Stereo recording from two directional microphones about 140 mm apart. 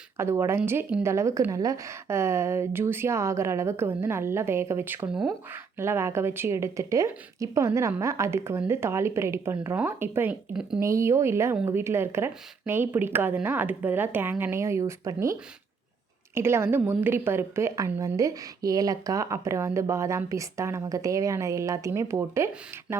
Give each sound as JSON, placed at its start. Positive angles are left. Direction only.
{"t": 0.2, "sound": "a woman's voice", "side_deg": -20}